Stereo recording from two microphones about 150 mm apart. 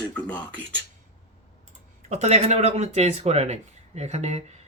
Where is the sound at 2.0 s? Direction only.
45° right (ahead or behind).